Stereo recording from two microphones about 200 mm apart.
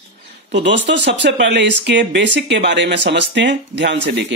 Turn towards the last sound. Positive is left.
turn(degrees=-60)  # may be behind; listen again after turning